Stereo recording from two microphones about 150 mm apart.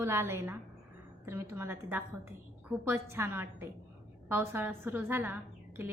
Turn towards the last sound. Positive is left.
turn(degrees=-15)  # may be behind; listen again after turning